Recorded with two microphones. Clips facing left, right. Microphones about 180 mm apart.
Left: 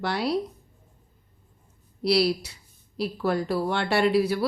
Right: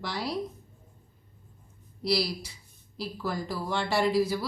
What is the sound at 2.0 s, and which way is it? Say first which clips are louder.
Speech: left 6 dB; 65° left (ahead or behind).